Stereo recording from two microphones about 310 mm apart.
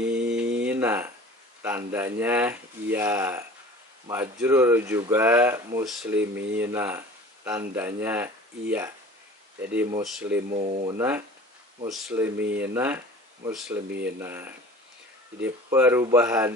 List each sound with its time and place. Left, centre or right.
0.0 s mantra: centre
0.6 s a sound: centre
1.6 s speech: centre
10.5 s speech: right
10.9 s speech: centre